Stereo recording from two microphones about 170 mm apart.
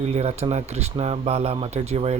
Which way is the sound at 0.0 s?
40° right (ahead or behind).